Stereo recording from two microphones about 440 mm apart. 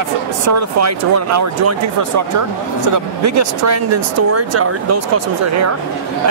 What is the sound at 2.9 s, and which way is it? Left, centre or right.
Speech, right.